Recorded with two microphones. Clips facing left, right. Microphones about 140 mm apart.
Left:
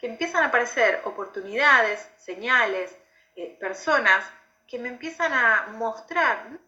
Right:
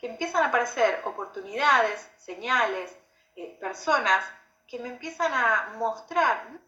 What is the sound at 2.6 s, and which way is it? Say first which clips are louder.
Speech: left 3 dB; 10° right (ahead or behind).